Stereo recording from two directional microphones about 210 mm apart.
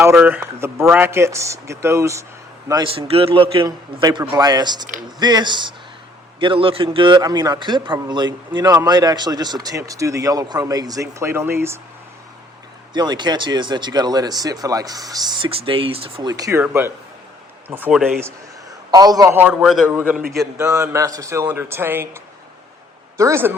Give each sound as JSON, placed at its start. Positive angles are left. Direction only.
{"t": 0.0, "sound": "speech", "side_deg": -10}
{"t": 12.9, "sound": "speech", "side_deg": -20}